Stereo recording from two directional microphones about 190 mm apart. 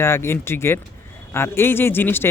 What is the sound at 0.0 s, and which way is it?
Speech, 15° left (ahead or behind).